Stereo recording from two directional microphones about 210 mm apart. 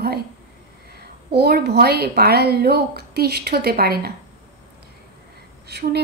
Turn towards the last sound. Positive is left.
turn(degrees=-50)  # may be behind; listen again after turning